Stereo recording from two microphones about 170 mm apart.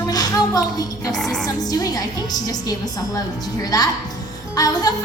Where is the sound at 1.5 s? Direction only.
20° left (ahead or behind).